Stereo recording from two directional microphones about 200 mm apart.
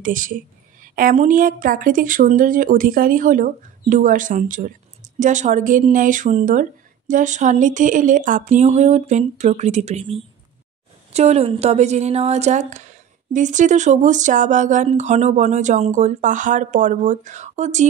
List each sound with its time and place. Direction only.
0.0 s a woman's voice: 40° right (ahead or behind)
11.1 s a woman's voice: 30° right (ahead or behind)